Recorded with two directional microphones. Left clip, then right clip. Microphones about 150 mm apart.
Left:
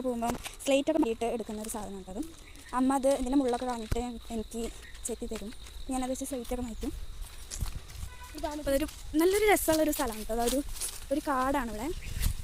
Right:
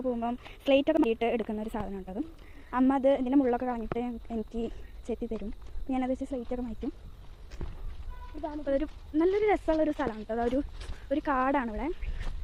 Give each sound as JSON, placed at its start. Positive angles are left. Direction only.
{"t": 0.0, "sound": "speech", "side_deg": 15}
{"t": 3.9, "sound": "speech", "side_deg": 10}
{"t": 5.9, "sound": "speech", "side_deg": 0}
{"t": 6.1, "sound": "speech", "side_deg": 15}
{"t": 8.6, "sound": "speech", "side_deg": 20}
{"t": 9.7, "sound": "speech", "side_deg": 20}